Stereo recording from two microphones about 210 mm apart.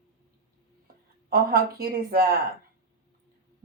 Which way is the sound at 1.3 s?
45° right (ahead or behind).